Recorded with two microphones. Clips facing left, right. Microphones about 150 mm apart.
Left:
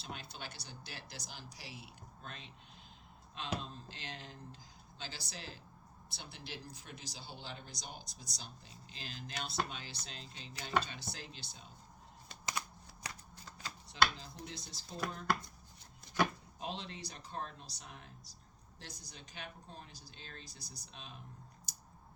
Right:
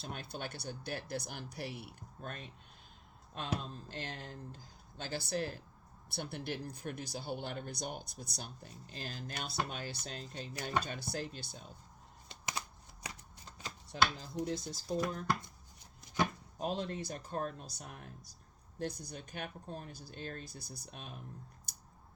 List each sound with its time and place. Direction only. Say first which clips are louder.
0.0 s speech: right 5 dB; 50° right (ahead or behind)
12.3 s a sound: even; 25° right (ahead or behind)
13.3 s shuffling cards: right 1 dB; 20° right (ahead or behind)
13.9 s speech: right 1 dB; 45° right (ahead or behind)
16.6 s speech: right 7 dB; 45° right (ahead or behind)
21.7 s a sound: left 1 dB; 55° right (ahead or behind)